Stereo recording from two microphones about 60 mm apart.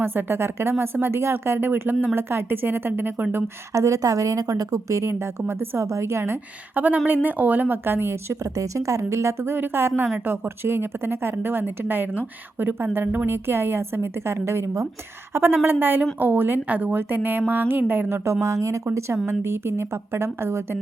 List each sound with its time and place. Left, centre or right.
0.0 s speech: right
3.7 s a woman's voice: right
5.4 s a woman's voice: right
6.7 s speech: right
8.4 s speech: right
9.6 s speech: right
10.2 s speech: right
10.6 s speech: right
18.3 s speech: right
18.9 s a woman's voice: right